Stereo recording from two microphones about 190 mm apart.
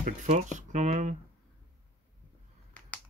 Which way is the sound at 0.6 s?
40° right (ahead or behind).